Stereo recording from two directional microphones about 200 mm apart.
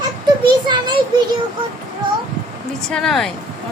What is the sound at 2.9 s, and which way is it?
Speech, centre (ahead or behind).